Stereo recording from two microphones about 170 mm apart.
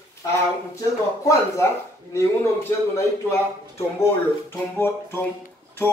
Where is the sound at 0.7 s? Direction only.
20° left (ahead or behind).